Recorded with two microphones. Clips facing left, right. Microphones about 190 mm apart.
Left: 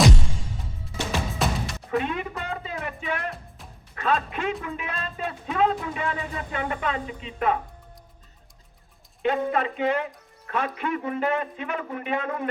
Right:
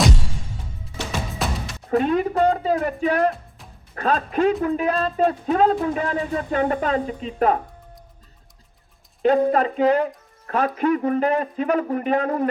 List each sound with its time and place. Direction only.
1.4 s music: centre (ahead or behind)
1.9 s speech: 40° right (ahead or behind)
9.2 s speech: 40° right (ahead or behind)